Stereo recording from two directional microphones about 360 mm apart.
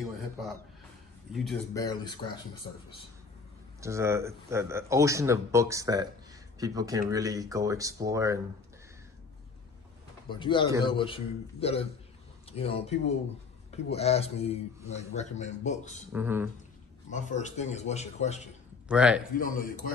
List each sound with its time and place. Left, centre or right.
1.3 s speech: centre
3.8 s speech: centre
10.3 s speech: centre
16.1 s speech: centre
17.1 s a man's voice: centre
18.9 s speech: centre
19.3 s a man's voice: left